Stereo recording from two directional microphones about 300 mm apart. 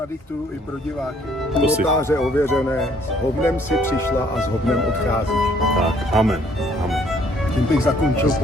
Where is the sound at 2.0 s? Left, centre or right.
Centre.